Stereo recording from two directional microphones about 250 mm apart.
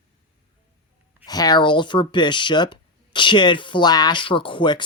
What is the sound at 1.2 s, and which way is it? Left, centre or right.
Speech, centre.